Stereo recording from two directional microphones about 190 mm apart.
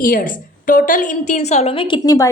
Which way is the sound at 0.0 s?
50° left (ahead or behind).